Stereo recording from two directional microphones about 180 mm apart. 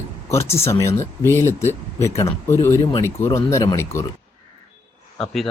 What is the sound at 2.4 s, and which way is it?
Speech, 15° left (ahead or behind).